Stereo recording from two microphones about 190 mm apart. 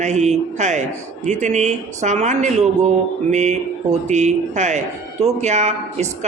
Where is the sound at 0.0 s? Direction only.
40° right (ahead or behind).